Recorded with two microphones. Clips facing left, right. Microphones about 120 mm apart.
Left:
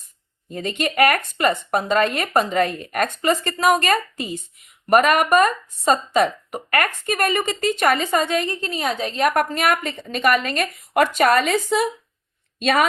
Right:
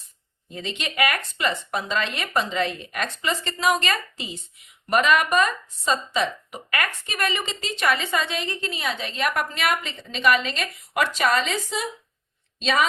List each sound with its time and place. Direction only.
0.5 s speech: 50° left (ahead or behind)